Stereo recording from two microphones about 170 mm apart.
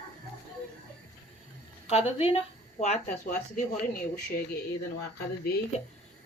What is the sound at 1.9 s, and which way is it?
A woman's voice, 35° left (ahead or behind).